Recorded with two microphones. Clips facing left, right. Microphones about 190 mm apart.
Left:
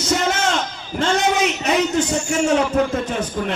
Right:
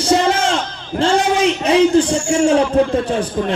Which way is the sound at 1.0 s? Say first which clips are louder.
Right 4 dB; 30° right (ahead or behind).